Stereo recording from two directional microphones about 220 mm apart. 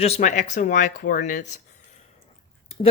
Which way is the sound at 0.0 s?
30° left (ahead or behind).